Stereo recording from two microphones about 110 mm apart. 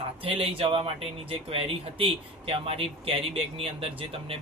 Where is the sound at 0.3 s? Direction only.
55° right (ahead or behind).